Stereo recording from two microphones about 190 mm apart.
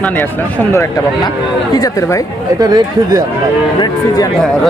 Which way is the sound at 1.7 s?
20° left (ahead or behind).